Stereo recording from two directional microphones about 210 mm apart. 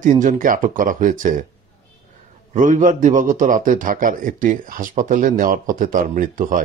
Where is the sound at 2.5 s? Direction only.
35° right (ahead or behind).